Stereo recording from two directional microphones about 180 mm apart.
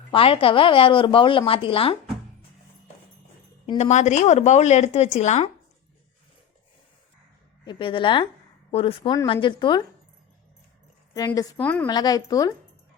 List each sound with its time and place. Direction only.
0.1 s speech: 30° left (ahead or behind)
3.8 s speech: 40° left (ahead or behind)
7.6 s speech: 25° left (ahead or behind)
11.3 s a woman's voice: 10° left (ahead or behind)
11.9 s speech: 20° left (ahead or behind)